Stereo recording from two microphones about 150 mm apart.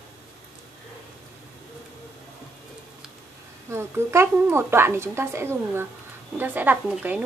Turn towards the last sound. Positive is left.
turn(degrees=-10)  # may be behind; listen again after turning